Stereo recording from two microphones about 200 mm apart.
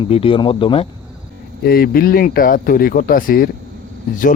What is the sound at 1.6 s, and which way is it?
Speech, 50° left (ahead or behind).